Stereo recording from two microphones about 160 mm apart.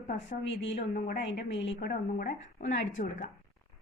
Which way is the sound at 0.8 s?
80° left.